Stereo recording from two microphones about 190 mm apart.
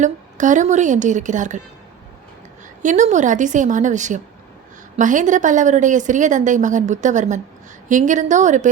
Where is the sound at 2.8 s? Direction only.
40° right (ahead or behind).